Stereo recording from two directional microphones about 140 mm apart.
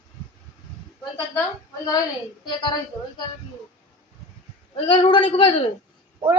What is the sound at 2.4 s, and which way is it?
Speech, 35° left (ahead or behind).